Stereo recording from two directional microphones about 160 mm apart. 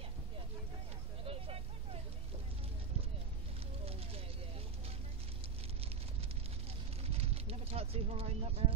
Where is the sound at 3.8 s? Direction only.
35° right (ahead or behind).